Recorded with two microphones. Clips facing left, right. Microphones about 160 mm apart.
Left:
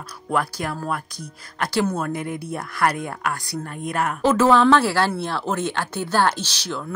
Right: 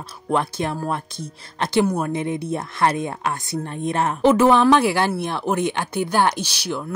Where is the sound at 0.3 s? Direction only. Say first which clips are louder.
Right 2 dB; 25° right (ahead or behind).